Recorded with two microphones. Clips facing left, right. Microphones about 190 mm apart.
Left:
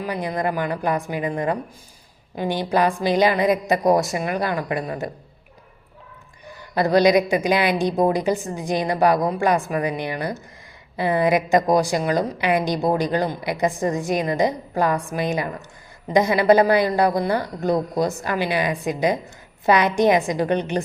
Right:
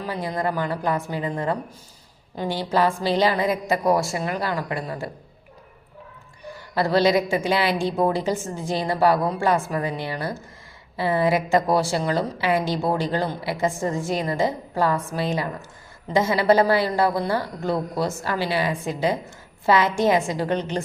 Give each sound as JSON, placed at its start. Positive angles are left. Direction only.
{"t": 0.0, "sound": "a woman's voice", "side_deg": 15}
{"t": 6.7, "sound": "a woman's voice", "side_deg": 15}